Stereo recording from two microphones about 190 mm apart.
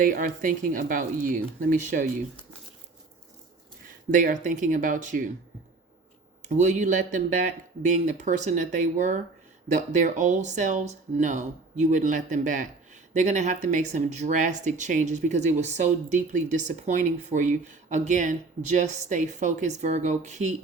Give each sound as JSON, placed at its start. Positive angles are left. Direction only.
{"t": 0.0, "sound": "speech", "side_deg": -45}
{"t": 4.1, "sound": "speech", "side_deg": -45}
{"t": 6.5, "sound": "speech", "side_deg": -40}